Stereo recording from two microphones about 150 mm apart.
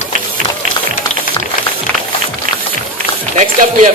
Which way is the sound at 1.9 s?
10° left (ahead or behind).